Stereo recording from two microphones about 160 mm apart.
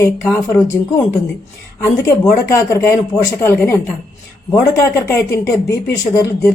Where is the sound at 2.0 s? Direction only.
20° left (ahead or behind).